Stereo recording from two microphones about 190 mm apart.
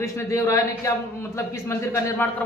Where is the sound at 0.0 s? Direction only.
15° left (ahead or behind).